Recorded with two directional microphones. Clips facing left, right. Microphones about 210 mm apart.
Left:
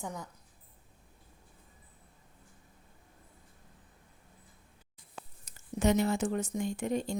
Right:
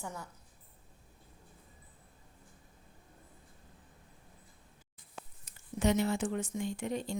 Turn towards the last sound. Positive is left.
turn(degrees=45)  # may be behind; listen again after turning